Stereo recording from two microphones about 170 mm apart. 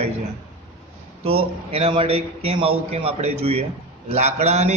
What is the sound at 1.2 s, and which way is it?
A man's voice, 35° right (ahead or behind).